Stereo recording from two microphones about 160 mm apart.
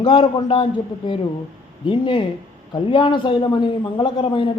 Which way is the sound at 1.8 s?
30° left (ahead or behind).